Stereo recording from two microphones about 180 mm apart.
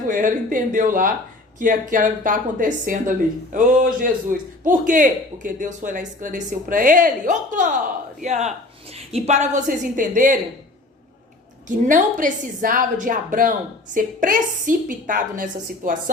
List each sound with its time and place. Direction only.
0.1 s a man's voice: 50° right (ahead or behind)
11.9 s a man's voice: 45° right (ahead or behind)